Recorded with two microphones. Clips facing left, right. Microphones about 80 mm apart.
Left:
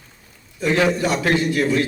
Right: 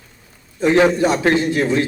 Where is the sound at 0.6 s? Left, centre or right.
Right.